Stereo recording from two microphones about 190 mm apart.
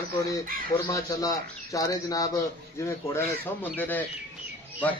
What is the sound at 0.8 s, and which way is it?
A man's voice, 15° left (ahead or behind).